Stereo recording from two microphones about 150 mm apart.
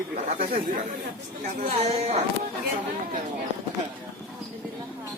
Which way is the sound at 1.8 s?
45° right (ahead or behind).